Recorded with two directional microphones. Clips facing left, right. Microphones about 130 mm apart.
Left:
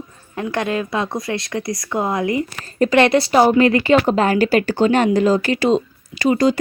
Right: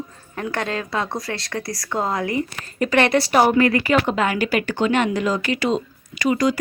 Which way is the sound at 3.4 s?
25° left (ahead or behind).